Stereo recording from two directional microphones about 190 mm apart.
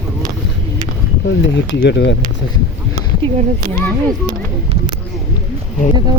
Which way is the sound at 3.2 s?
35° right (ahead or behind).